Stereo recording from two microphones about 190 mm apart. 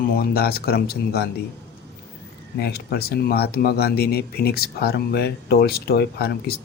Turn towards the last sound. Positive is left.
turn(degrees=55)  # may be behind; listen again after turning